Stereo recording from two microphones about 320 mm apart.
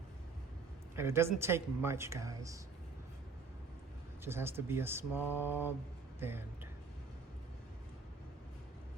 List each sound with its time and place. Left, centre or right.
0.9 s speech: centre
4.2 s speech: centre